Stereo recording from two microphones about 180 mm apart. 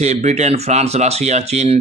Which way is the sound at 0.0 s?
40° right (ahead or behind).